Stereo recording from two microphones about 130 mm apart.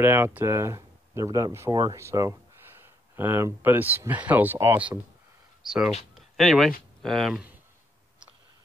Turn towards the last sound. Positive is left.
turn(degrees=0)  # may be behind; listen again after turning